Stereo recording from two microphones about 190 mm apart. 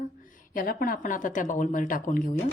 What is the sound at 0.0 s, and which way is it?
A woman's voice, 45° left (ahead or behind).